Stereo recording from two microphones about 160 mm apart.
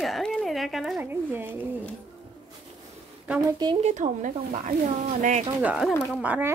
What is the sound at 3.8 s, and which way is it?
Speech, 50° right (ahead or behind).